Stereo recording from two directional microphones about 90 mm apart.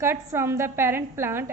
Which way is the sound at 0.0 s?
30° right (ahead or behind).